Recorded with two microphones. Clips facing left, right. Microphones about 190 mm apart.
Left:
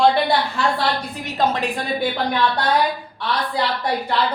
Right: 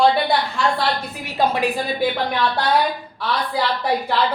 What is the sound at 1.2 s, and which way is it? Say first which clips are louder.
Speech: right 2 dB; 10° right (ahead or behind).